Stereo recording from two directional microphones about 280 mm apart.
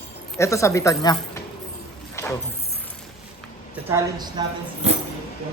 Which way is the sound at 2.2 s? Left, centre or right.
Centre.